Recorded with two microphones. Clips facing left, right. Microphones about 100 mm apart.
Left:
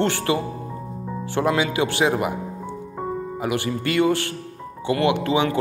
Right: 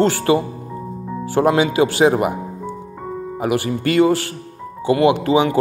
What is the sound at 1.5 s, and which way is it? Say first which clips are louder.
Speech: right 6 dB; 25° right (ahead or behind).